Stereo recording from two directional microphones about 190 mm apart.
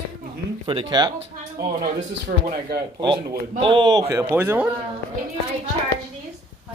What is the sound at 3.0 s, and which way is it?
A man's voice, 25° right (ahead or behind).